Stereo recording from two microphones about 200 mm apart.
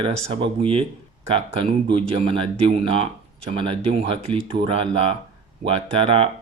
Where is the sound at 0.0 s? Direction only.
25° right (ahead or behind).